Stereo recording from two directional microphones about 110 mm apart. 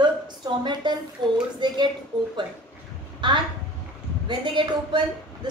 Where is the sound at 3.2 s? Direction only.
45° right (ahead or behind).